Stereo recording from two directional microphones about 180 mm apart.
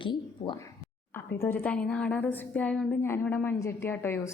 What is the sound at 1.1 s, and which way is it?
A woman's voice, 15° left (ahead or behind).